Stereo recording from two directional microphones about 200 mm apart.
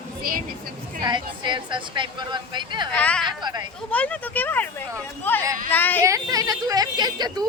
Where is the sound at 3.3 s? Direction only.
20° right (ahead or behind).